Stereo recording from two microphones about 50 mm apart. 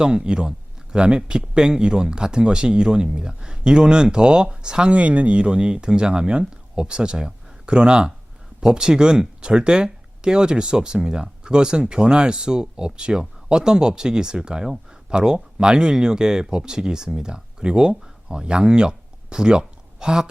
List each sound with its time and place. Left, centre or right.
0.0 s speech: centre